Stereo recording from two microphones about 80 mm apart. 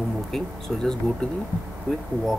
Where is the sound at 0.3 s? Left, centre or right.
Centre.